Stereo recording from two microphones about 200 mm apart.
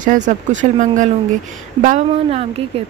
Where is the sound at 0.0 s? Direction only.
40° right (ahead or behind).